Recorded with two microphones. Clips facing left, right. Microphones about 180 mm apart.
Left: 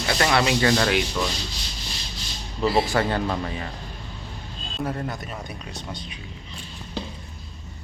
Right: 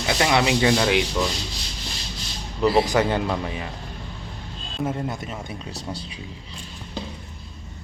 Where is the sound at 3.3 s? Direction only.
15° right (ahead or behind).